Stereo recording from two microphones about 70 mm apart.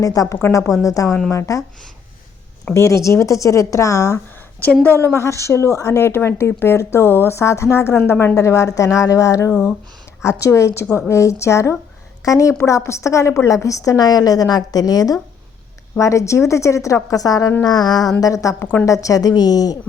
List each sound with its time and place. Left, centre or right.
0.0 s a woman's voice: left
2.7 s a woman's voice: left
8.4 s a woman's voice: left
16.0 s a woman's voice: left
17.6 s a sound: left
18.2 s a woman's voice: left
18.6 s a woman's voice: left
18.9 s a woman's voice: left